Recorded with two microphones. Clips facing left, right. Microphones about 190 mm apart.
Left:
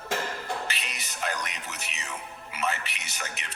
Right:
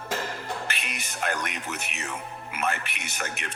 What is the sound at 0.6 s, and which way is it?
A man's voice, 55° right (ahead or behind).